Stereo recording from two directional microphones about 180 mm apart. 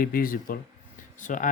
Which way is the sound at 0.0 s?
55° left (ahead or behind).